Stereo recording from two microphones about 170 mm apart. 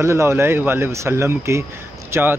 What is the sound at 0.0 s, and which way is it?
Speech, 15° right (ahead or behind).